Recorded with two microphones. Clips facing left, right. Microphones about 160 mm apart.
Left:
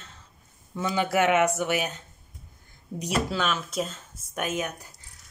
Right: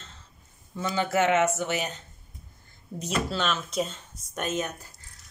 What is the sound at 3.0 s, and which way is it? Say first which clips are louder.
Speech: left 1 dB; 10° left (ahead or behind).